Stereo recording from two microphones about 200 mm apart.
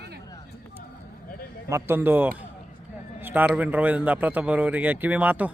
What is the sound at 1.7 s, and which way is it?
A man's voice, 10° right (ahead or behind).